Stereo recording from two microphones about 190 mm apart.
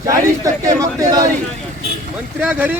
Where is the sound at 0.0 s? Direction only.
20° right (ahead or behind).